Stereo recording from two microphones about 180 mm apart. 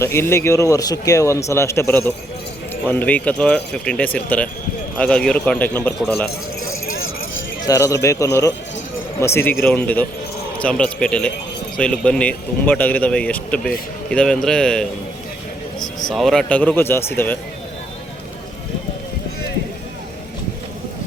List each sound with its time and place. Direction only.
0.0 s speech: 15° left (ahead or behind)
7.7 s speech: 20° left (ahead or behind); by 14.8 s 5° left (ahead or behind)
16.0 s speech: centre (ahead or behind)